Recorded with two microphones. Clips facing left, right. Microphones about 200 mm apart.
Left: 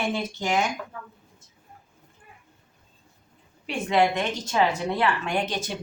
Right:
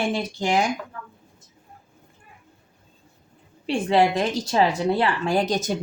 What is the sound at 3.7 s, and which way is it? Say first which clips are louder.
Speech: right 3 dB; 30° right (ahead or behind).